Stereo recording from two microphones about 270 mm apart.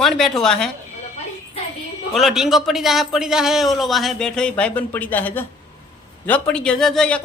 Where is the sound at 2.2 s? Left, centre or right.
Centre.